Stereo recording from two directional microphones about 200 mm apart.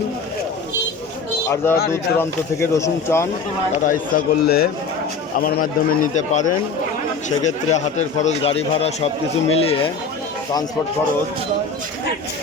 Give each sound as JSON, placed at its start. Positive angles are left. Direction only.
{"t": 1.9, "sound": "speech", "side_deg": 15}
{"t": 3.8, "sound": "a man's voice", "side_deg": 45}